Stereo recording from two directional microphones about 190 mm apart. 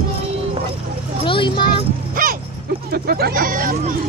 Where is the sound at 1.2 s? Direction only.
25° left (ahead or behind).